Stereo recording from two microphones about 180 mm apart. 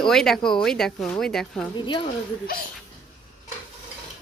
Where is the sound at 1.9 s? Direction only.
25° left (ahead or behind).